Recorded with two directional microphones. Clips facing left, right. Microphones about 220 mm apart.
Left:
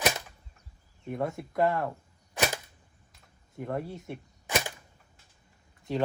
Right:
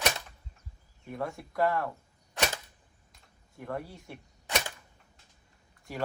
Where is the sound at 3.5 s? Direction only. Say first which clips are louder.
Left 4 dB; 25° left (ahead or behind).